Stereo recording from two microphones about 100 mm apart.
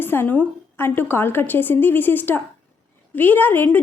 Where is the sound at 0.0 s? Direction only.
20° left (ahead or behind).